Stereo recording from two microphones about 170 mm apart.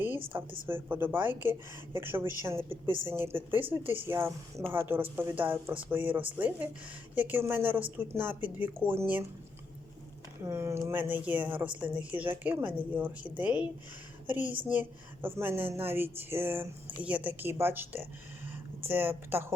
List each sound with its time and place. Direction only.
0.3 s speech: 15° right (ahead or behind)
10.4 s speech: 15° right (ahead or behind)